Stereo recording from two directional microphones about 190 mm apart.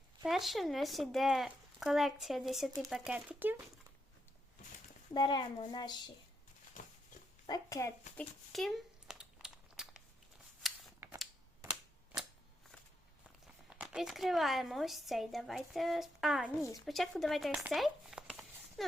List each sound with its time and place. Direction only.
0.3 s speech: centre (ahead or behind)
5.1 s speech: 20° left (ahead or behind)
6.8 s a sound: 45° left (ahead or behind)
7.4 s a child's voice: 20° left (ahead or behind)
8.1 s crumpling: 5° left (ahead or behind)
10.6 s a sound: centre (ahead or behind)
11.0 s a sound: 15° right (ahead or behind)
11.6 s typewriter: 5° right (ahead or behind)
13.7 s speech: 5° right (ahead or behind)